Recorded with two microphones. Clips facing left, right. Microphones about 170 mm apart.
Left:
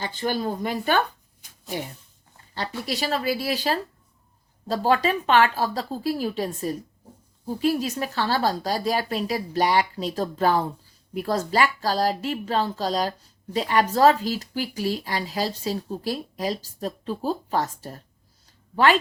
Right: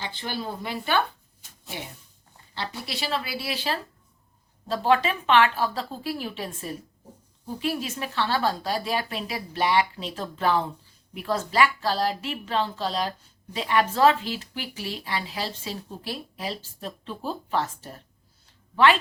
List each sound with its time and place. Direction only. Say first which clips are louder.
0.0 s speech: left 6 dB; 45° left (ahead or behind)
2.6 s a woman's voice: left 5 dB; 45° left (ahead or behind)